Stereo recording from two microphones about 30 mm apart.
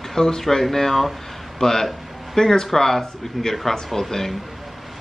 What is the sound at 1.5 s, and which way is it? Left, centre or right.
Speech, centre.